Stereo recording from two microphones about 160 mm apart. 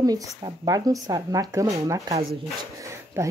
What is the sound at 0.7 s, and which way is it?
Speech, 25° right (ahead or behind).